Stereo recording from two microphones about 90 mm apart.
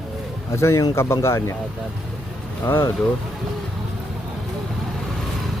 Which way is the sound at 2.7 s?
30° left (ahead or behind).